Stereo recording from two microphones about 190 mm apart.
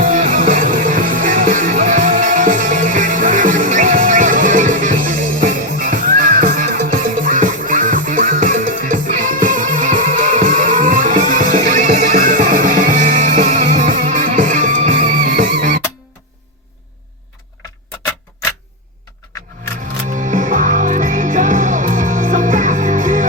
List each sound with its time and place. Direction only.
0.0 s music: 45° right (ahead or behind)
20.1 s music: 40° right (ahead or behind)